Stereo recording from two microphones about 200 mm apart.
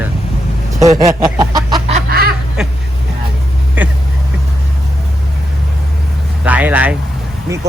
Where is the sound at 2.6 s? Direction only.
5° right (ahead or behind).